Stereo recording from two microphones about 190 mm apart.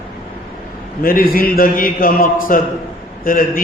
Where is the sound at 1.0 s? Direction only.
50° left (ahead or behind).